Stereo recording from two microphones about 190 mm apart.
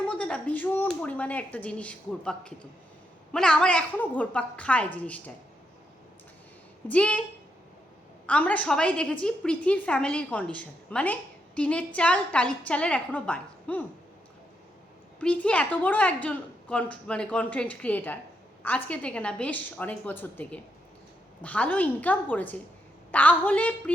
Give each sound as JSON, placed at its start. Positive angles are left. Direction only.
{"t": 0.1, "sound": "a woman's voice", "side_deg": 5}
{"t": 6.8, "sound": "a woman's voice", "side_deg": 5}
{"t": 8.3, "sound": "a woman's voice", "side_deg": 5}
{"t": 15.2, "sound": "a woman's voice", "side_deg": 5}